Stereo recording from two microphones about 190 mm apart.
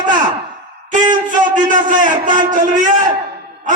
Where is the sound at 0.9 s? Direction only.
40° right (ahead or behind).